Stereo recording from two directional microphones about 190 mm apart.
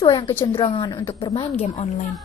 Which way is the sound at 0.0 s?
25° left (ahead or behind).